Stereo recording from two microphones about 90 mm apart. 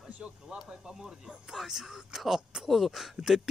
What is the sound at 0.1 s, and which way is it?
Speech, 10° right (ahead or behind).